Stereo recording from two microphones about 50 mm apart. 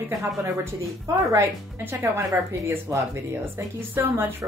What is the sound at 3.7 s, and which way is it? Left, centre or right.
Speech, right.